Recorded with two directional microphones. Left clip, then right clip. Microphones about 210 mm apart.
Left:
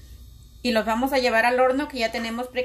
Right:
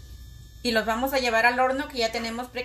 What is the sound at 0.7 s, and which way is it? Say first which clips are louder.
A woman's voice: left 2 dB; 50° left (ahead or behind).